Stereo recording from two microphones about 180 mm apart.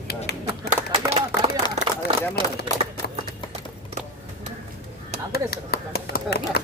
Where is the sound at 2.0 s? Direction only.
30° right (ahead or behind).